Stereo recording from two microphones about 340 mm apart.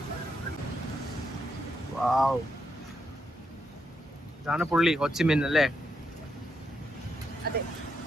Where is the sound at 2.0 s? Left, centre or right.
Centre.